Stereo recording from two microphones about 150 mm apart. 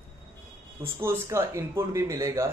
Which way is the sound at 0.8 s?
15° right (ahead or behind).